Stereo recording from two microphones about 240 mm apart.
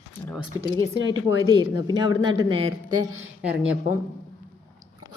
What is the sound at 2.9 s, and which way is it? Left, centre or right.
Speech, right.